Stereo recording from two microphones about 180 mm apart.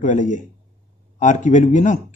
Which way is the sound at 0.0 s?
45° left (ahead or behind).